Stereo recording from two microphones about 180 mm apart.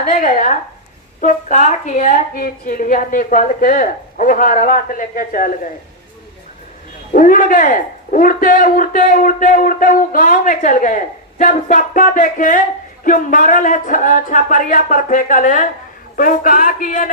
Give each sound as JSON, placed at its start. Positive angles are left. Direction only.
{"t": 0.0, "sound": "a man's voice", "side_deg": 50}
{"t": 7.1, "sound": "a man's voice", "side_deg": 50}